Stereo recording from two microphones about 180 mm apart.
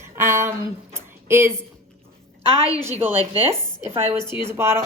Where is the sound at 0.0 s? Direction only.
15° right (ahead or behind).